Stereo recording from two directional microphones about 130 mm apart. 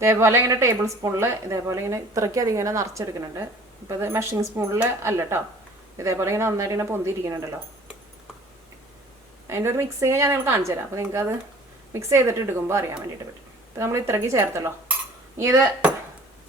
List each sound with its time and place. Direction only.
0.0 s a woman's voice: 20° right (ahead or behind)
9.5 s a woman's voice: 20° right (ahead or behind)